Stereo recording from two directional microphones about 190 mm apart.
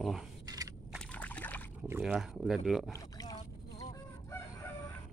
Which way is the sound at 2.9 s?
20° left (ahead or behind).